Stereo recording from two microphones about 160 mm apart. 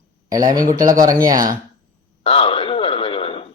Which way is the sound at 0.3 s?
25° right (ahead or behind).